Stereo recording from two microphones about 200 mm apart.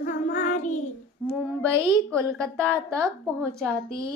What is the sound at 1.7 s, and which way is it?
A woman's voice, 15° right (ahead or behind).